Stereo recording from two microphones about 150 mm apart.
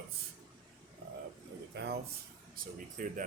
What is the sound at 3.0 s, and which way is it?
Speech, 60° right (ahead or behind).